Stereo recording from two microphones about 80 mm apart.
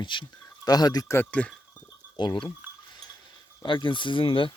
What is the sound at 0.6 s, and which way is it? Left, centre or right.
Speech, left.